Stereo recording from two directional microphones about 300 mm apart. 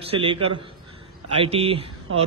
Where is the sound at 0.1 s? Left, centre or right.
Centre.